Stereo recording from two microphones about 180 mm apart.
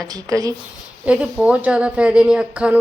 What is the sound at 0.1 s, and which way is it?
Speech, 20° right (ahead or behind).